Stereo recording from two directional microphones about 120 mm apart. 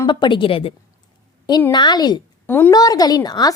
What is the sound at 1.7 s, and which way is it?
Speech, 35° left (ahead or behind).